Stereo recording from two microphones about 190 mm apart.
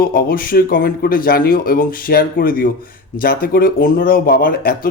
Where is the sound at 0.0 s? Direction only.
50° left (ahead or behind).